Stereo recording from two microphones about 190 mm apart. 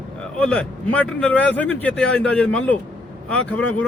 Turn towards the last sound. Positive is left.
turn(degrees=5)  # may be behind; listen again after turning